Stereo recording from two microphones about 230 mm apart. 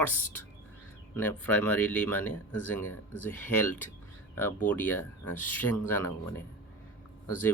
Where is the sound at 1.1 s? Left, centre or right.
Centre.